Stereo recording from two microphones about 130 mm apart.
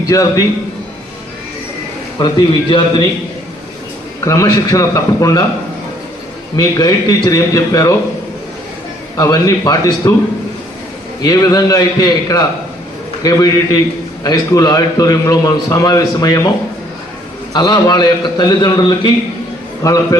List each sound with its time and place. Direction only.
0.0 s a man's voice: 25° left (ahead or behind)
2.1 s a man's voice: 35° left (ahead or behind)
4.2 s a man's voice: 25° left (ahead or behind)
6.6 s a man's voice: 30° left (ahead or behind)
9.1 s a man's voice: 25° left (ahead or behind)
11.2 s a man's voice: 25° left (ahead or behind)
17.5 s a man's voice: 30° left (ahead or behind)